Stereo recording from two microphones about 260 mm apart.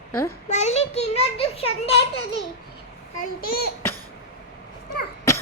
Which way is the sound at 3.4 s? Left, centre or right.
Left.